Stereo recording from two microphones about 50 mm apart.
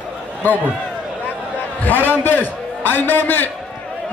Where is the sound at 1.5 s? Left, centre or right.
Left.